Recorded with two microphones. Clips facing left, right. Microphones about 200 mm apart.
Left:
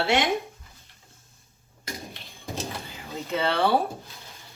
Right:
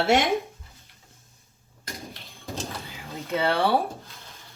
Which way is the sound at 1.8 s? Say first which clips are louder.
Left 1 dB; centre (ahead or behind).